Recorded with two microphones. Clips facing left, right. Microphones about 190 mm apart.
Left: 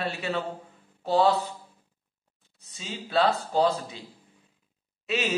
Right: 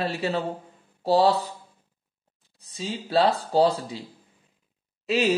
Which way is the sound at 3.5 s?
30° right (ahead or behind).